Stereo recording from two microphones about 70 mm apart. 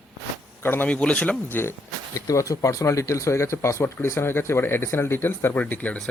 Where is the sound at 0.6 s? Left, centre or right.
Left.